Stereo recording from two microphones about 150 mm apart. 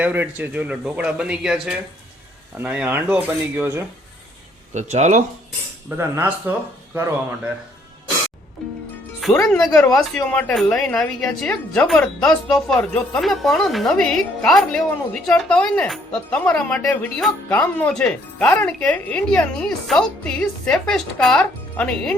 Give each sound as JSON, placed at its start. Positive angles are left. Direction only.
{"t": 0.0, "sound": "speech", "side_deg": -10}
{"t": 4.7, "sound": "speech", "side_deg": -50}
{"t": 6.0, "sound": "speech", "side_deg": -15}
{"t": 9.5, "sound": "a woman's voice", "side_deg": 5}